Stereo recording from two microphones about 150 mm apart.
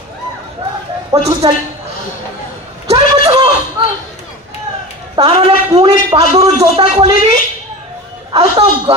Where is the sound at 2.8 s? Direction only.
45° right (ahead or behind).